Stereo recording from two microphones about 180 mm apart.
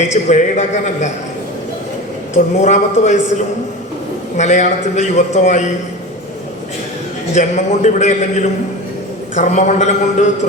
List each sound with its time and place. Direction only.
0.0 s a man's voice: 40° left (ahead or behind)
2.3 s a man's voice: 40° left (ahead or behind)
4.4 s a man's voice: 40° left (ahead or behind)
7.3 s a man's voice: 40° left (ahead or behind)